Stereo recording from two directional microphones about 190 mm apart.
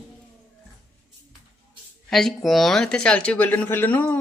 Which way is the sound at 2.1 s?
Centre (ahead or behind).